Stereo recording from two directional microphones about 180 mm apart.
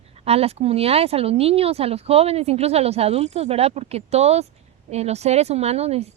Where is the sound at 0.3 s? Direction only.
35° right (ahead or behind).